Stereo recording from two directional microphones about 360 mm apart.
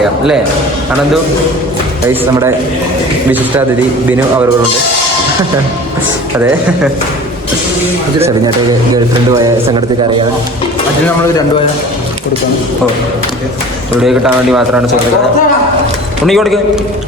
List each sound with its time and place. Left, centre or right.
9.4 s speech: centre
14.0 s speech: centre
16.2 s speech: centre